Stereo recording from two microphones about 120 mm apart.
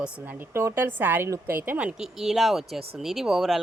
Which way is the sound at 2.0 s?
5° right (ahead or behind).